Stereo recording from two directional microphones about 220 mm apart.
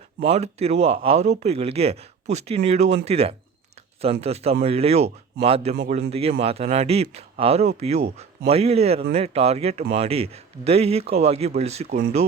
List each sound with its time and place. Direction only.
0.2 s speech: 30° right (ahead or behind)
5.7 s speech: 40° right (ahead or behind)
6.1 s speech: 25° right (ahead or behind)